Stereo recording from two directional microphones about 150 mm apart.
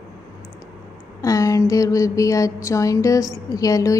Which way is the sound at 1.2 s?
20° left (ahead or behind).